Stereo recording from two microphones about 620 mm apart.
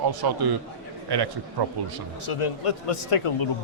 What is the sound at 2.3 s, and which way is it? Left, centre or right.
A man's voice, left.